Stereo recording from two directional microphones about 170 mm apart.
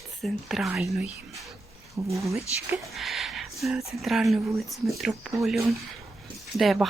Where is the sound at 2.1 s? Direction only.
15° right (ahead or behind).